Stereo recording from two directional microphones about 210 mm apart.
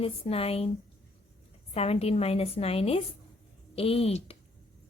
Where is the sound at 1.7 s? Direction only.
30° left (ahead or behind).